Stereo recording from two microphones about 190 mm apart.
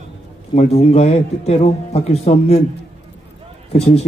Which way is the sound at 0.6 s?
35° left (ahead or behind).